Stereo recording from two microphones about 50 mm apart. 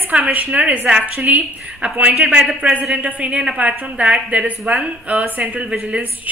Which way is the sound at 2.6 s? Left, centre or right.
Right.